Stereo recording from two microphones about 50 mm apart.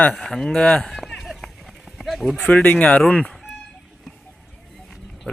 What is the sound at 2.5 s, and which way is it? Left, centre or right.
Speech, left.